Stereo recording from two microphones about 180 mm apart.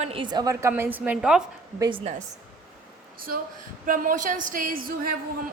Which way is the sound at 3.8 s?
50° right (ahead or behind).